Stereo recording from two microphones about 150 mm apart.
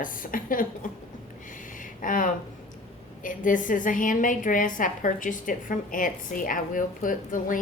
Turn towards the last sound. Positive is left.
turn(degrees=65)  # may be behind; listen again after turning